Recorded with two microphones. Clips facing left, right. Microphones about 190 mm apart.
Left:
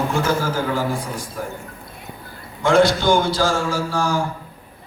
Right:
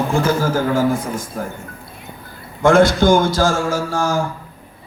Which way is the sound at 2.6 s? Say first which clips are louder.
Right 3 dB; 50° right (ahead or behind).